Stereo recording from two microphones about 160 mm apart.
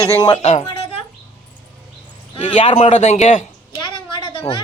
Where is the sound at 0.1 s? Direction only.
25° left (ahead or behind).